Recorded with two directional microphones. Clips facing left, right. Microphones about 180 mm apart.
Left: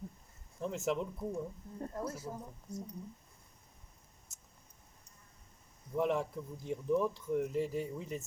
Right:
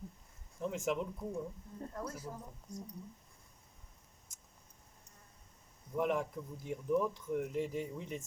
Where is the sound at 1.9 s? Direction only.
25° left (ahead or behind).